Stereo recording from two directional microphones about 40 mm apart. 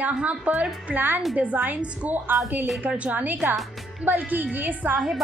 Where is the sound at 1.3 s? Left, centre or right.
Right.